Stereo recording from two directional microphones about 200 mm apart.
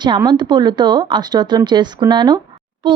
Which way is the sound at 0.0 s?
20° right (ahead or behind).